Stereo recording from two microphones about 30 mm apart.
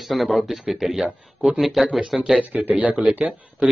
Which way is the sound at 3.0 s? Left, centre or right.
Right.